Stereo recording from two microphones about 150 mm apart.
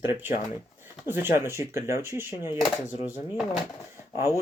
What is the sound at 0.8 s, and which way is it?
Speech, 15° right (ahead or behind).